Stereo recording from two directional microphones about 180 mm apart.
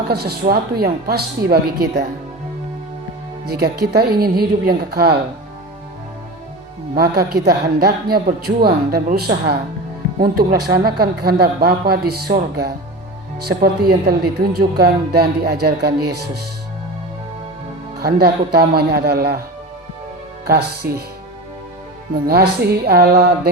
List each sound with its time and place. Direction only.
0.1 s a woman's voice: 60° right (ahead or behind)
3.5 s a woman's voice: 60° right (ahead or behind)
6.9 s a woman's voice: 60° right (ahead or behind)
13.6 s a woman's voice: 60° right (ahead or behind)
18.0 s a woman's voice: 60° right (ahead or behind)
20.5 s a woman's voice: 60° right (ahead or behind)
22.3 s a woman's voice: 60° right (ahead or behind)